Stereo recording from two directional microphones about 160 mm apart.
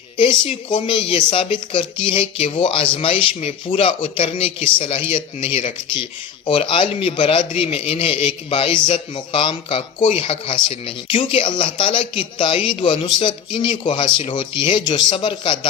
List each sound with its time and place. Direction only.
0.2 s speech: 30° left (ahead or behind)